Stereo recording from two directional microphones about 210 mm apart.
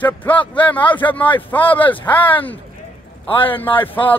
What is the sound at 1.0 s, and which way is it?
A man's voice, 10° left (ahead or behind).